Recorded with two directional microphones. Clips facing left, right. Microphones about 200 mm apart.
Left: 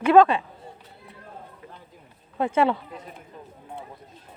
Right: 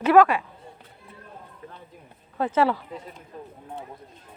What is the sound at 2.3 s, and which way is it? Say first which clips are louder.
Speech: even; 25° left (ahead or behind).